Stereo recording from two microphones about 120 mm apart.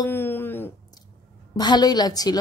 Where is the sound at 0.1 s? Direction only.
20° left (ahead or behind).